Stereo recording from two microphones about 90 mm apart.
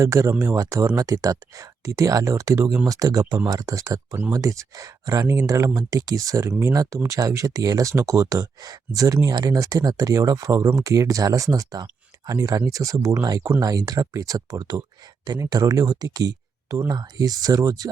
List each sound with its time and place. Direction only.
0.0 s speech: 35° right (ahead or behind)
13.2 s speech: 45° right (ahead or behind)